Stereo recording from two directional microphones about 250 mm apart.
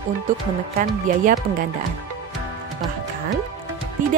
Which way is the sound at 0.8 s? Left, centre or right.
Right.